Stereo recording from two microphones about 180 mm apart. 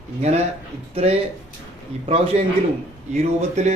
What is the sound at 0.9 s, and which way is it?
Speech, 35° right (ahead or behind).